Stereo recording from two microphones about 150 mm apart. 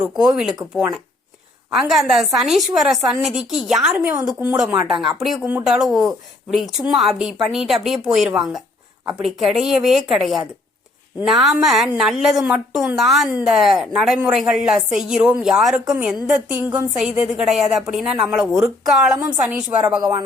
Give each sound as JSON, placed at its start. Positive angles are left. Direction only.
{"t": 0.0, "sound": "a woman's voice", "side_deg": -5}
{"t": 16.6, "sound": "a woman's voice", "side_deg": -15}
{"t": 17.0, "sound": "a woman's voice", "side_deg": -5}
{"t": 20.0, "sound": "speech", "side_deg": -25}